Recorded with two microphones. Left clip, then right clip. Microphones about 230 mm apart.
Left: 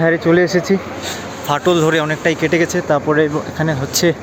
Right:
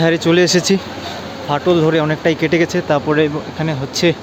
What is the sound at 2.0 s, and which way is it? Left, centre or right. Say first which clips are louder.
Speech: even; centre.